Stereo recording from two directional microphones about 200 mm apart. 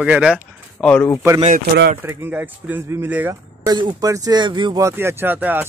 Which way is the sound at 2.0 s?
10° right (ahead or behind).